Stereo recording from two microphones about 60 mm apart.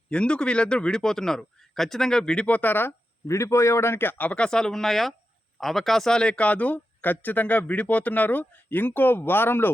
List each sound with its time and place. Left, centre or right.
0.1 s a man's voice: centre
2.5 s speech: left
3.2 s speech: left
4.4 s a man's voice: centre; by 9.7 s left